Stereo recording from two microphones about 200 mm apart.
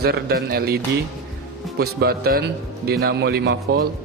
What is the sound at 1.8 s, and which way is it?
A man's voice, 50° right (ahead or behind).